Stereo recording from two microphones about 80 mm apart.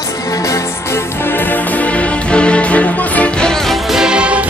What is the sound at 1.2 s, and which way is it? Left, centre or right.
Music, left.